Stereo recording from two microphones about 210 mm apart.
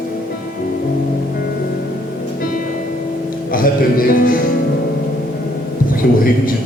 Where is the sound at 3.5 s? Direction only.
40° left (ahead or behind).